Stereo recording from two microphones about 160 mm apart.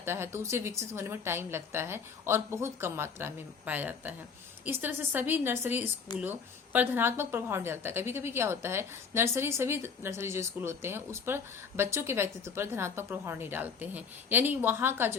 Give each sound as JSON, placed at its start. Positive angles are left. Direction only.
{"t": 0.0, "sound": "a woman's voice", "side_deg": -15}
{"t": 6.1, "sound": "speech", "side_deg": 25}
{"t": 6.7, "sound": "a woman's voice", "side_deg": -15}